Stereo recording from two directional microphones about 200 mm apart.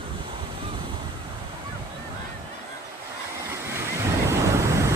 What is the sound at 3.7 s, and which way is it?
Waves, 15° right (ahead or behind).